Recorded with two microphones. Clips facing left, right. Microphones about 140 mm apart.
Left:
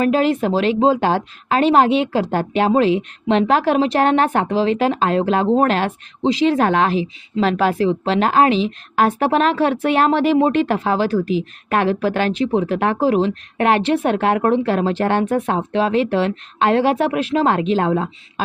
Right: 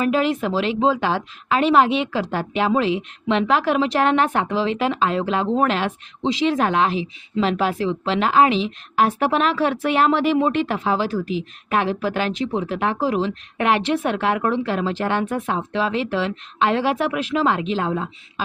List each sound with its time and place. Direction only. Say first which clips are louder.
0.0 s speech: left 3 dB; 40° left (ahead or behind); by 18.4 s 60° left (ahead or behind)